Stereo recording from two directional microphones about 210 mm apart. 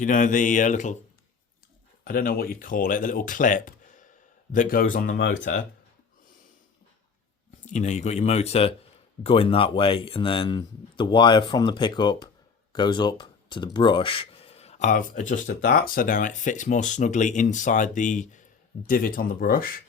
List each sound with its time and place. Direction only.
0.0 s speech: 40° left (ahead or behind)
2.0 s speech: 40° left (ahead or behind)
7.6 s speech: 35° left (ahead or behind)